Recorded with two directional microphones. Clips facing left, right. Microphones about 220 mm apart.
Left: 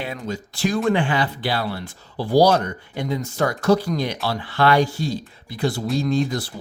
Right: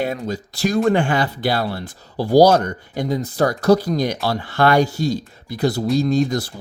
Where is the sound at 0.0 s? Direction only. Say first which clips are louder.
Right 5 dB; 40° right (ahead or behind).